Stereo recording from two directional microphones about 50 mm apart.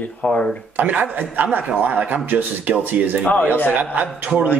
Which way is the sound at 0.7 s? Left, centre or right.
Right.